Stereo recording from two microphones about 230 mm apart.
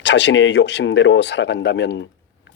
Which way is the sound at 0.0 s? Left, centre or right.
Left.